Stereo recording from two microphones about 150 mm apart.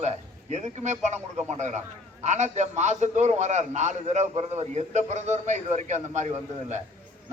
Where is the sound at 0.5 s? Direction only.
50° right (ahead or behind).